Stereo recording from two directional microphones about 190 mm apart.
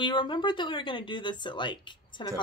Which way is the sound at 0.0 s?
25° left (ahead or behind).